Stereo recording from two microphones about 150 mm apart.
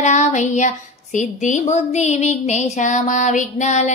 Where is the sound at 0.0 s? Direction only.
50° left (ahead or behind).